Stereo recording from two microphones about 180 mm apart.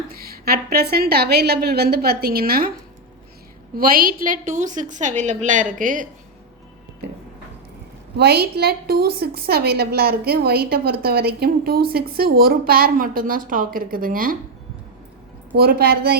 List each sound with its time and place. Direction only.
0.1 s a woman's voice: 55° right (ahead or behind)
3.8 s a woman's voice: 55° right (ahead or behind)
8.1 s a woman's voice: 65° right (ahead or behind)
15.5 s a woman's voice: 60° right (ahead or behind)